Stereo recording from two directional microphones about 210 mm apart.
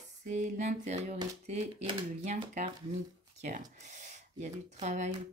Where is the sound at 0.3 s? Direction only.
35° right (ahead or behind).